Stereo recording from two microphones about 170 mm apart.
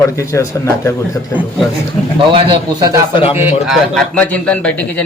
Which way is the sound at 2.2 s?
30° right (ahead or behind).